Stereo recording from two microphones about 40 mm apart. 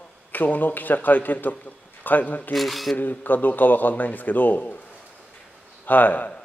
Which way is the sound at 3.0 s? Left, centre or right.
Left.